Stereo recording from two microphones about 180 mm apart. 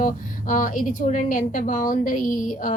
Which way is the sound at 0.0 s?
45° left (ahead or behind).